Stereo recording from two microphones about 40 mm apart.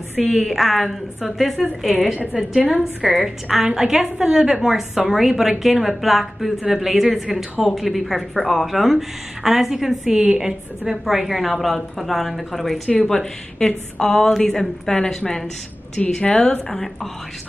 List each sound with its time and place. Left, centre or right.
0.2 s speech: centre
3.4 s a woman's voice: centre
10.9 s speech: centre
13.1 s a woman's voice: centre
16.2 s a woman's voice: left
16.7 s a woman's voice: centre